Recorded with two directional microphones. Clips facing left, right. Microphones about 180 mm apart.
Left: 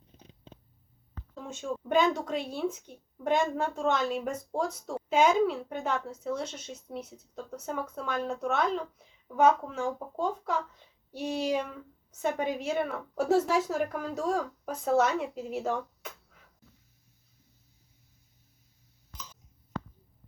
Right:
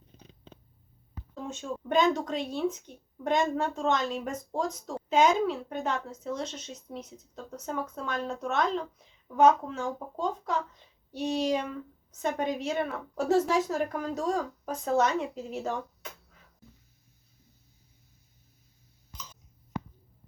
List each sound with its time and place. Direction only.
1.5 s speech: 10° left (ahead or behind)